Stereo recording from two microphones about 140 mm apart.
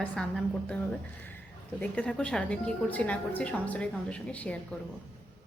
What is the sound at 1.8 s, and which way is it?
A woman's voice, 10° left (ahead or behind).